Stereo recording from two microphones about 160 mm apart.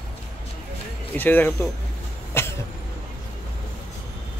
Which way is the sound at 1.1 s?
10° left (ahead or behind).